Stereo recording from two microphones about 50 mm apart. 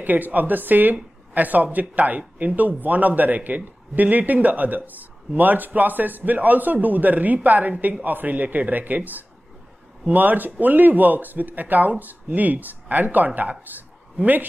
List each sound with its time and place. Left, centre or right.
0.0 s speech: right